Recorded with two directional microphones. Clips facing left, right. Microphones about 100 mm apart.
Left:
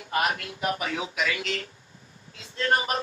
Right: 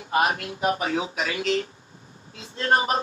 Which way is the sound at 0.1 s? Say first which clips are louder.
Right 4 dB; 30° right (ahead or behind).